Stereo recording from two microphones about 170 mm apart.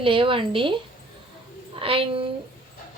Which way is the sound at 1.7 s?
30° right (ahead or behind).